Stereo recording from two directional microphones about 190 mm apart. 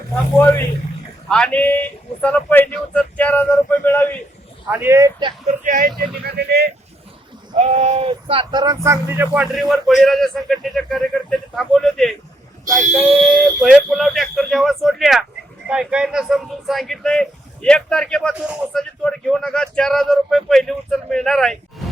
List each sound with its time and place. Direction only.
1.3 s speech: 5° left (ahead or behind)
4.7 s speech: 10° right (ahead or behind)
5.5 s speech: 45° right (ahead or behind)
6.2 s speech: 60° right (ahead or behind)
7.5 s speech: 35° right (ahead or behind); by 21.6 s centre (ahead or behind)